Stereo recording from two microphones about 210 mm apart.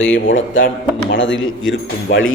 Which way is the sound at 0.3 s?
65° left (ahead or behind).